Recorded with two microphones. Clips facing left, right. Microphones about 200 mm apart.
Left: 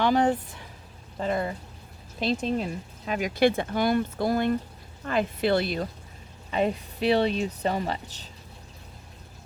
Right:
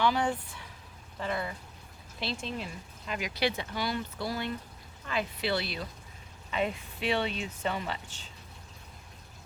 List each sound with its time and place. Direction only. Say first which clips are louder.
0.0 s speech: left 6 dB; 50° left (ahead or behind)